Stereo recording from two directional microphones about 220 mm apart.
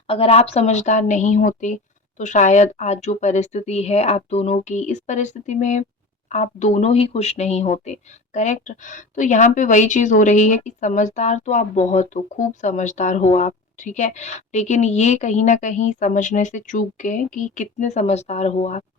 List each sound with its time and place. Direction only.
0.1 s a woman's voice: 25° left (ahead or behind)